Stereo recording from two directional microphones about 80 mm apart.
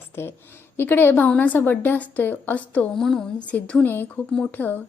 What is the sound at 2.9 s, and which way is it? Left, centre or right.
A woman's voice, centre.